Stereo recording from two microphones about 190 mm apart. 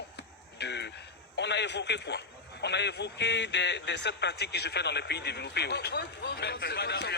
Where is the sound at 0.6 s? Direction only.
65° left (ahead or behind).